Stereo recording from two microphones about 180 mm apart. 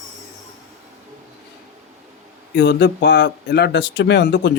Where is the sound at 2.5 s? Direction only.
70° left (ahead or behind).